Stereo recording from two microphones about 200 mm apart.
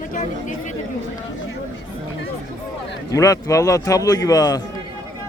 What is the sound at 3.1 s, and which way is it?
A man's voice, 15° left (ahead or behind).